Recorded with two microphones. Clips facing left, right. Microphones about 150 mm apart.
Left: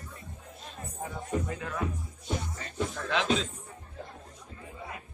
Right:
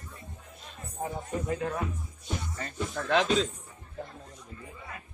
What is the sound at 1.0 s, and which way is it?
Speech, 35° right (ahead or behind).